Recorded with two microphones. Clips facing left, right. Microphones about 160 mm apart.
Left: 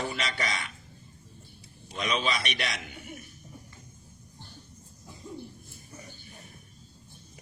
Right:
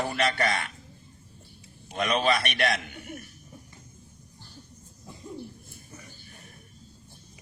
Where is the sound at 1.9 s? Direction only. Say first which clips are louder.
Right 5 dB; 55° right (ahead or behind).